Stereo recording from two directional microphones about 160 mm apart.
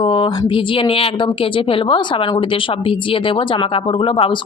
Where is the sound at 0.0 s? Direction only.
30° left (ahead or behind).